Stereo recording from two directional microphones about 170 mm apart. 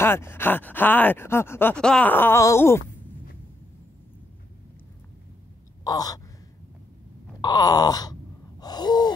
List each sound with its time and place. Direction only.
0.0 s speech: 15° left (ahead or behind)
5.9 s caw: 20° left (ahead or behind)
7.4 s a sound: 20° left (ahead or behind)